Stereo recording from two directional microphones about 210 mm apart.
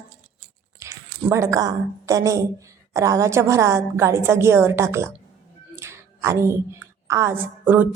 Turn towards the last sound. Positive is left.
turn(degrees=-10)  # may be behind; listen again after turning